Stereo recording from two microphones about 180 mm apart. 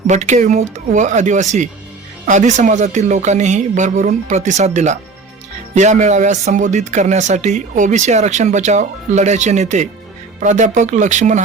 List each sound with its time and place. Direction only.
0.1 s speech: 40° right (ahead or behind)